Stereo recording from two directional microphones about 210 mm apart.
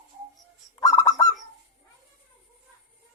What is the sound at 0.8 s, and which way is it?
Bird, 15° left (ahead or behind).